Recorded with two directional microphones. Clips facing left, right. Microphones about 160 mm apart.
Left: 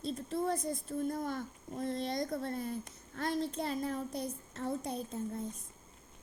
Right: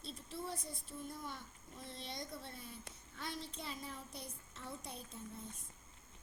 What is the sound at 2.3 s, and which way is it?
A woman's voice, 45° left (ahead or behind).